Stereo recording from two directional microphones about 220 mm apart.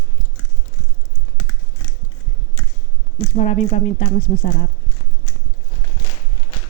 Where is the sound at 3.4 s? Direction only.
30° left (ahead or behind).